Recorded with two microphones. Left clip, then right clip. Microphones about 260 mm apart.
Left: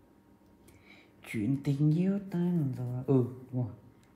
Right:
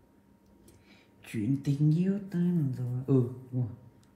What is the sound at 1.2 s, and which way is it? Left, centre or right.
A woman's voice, left.